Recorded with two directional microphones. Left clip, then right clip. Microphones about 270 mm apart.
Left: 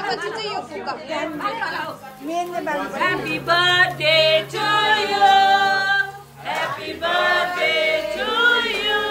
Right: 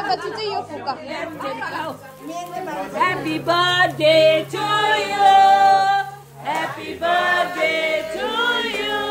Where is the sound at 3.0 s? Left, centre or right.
Centre.